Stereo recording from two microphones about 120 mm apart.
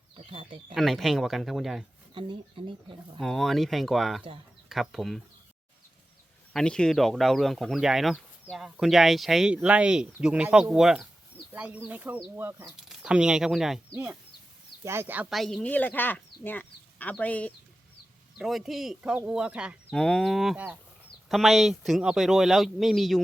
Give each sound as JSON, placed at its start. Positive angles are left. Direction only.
{"t": 0.3, "sound": "speech", "side_deg": -45}
{"t": 0.7, "sound": "speech", "side_deg": 0}
{"t": 2.1, "sound": "speech", "side_deg": -45}
{"t": 3.2, "sound": "speech", "side_deg": 0}
{"t": 6.5, "sound": "speech", "side_deg": 5}
{"t": 12.6, "sound": "speech", "side_deg": -5}
{"t": 15.3, "sound": "speech", "side_deg": 0}
{"t": 15.7, "sound": "speech", "side_deg": 15}
{"t": 18.3, "sound": "speech", "side_deg": 0}
{"t": 19.9, "sound": "speech", "side_deg": 5}